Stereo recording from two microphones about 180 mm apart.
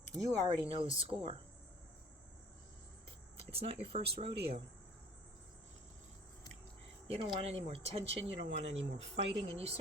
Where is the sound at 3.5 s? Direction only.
35° right (ahead or behind).